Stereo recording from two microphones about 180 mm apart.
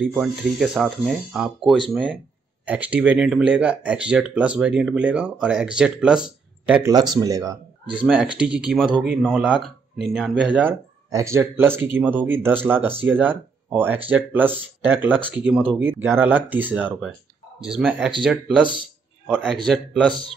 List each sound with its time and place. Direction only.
0.1 s speech: centre (ahead or behind)
6.9 s speech: 20° right (ahead or behind)
7.9 s speech: 5° right (ahead or behind)